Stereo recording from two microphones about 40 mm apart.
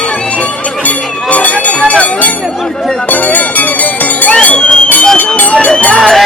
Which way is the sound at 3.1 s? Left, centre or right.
Left.